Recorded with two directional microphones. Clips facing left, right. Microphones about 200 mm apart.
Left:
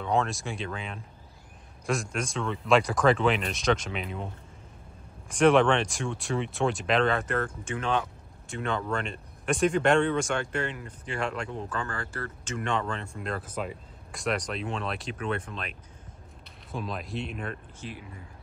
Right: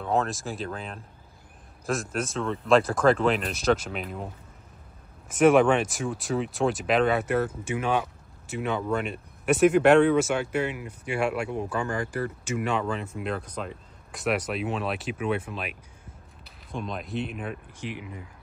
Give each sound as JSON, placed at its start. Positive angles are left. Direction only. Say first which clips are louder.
{"t": 0.0, "sound": "speech", "louder": "right 1 dB", "side_deg": 0}
{"t": 5.3, "sound": "speech", "louder": "right 2 dB", "side_deg": -5}
{"t": 14.2, "sound": "speech", "louder": "right 3 dB", "side_deg": -5}
{"t": 16.7, "sound": "speech", "louder": "right 2 dB", "side_deg": 0}
{"t": 17.7, "sound": "speech", "louder": "right 5 dB", "side_deg": -15}